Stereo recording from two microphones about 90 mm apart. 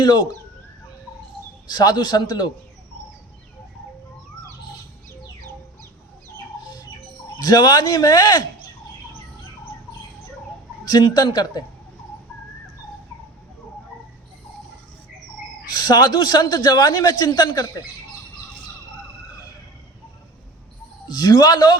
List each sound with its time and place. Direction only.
0.0 s speech: 55° left (ahead or behind)
1.7 s a man's voice: 50° left (ahead or behind)
7.3 s a man's voice: 50° left (ahead or behind)
10.8 s a man's voice: 50° left (ahead or behind)
15.7 s a man's voice: 50° left (ahead or behind)
21.1 s a man's voice: 50° left (ahead or behind)